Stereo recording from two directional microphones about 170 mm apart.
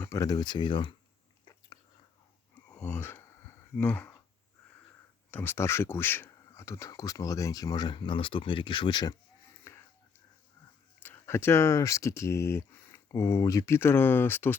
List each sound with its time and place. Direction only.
0.0 s speech: 20° left (ahead or behind)
2.6 s a sound: 10° left (ahead or behind)
5.3 s speech: 10° left (ahead or behind)
9.7 s whispering: 15° left (ahead or behind)
11.0 s speech: 15° left (ahead or behind)